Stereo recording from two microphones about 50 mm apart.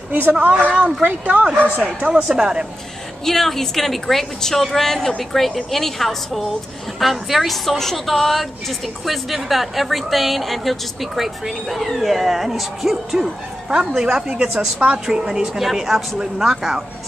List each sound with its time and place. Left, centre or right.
0.1 s speech: right
2.1 s speech: centre
3.3 s a woman's voice: centre